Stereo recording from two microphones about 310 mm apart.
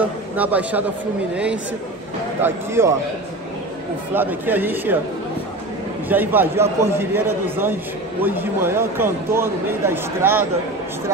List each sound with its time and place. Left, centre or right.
0.0 s a man's voice: centre
4.1 s a man's voice: centre
6.0 s a man's voice: centre